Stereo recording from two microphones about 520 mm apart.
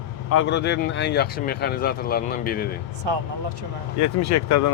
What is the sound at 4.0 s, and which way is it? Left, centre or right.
Speech, left.